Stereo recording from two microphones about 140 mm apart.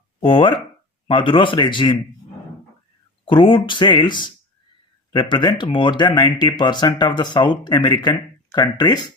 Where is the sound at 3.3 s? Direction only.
35° left (ahead or behind).